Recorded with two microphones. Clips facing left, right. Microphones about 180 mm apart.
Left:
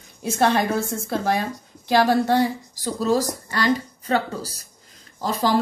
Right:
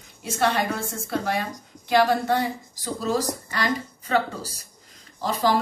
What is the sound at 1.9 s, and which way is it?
Speech, 35° left (ahead or behind).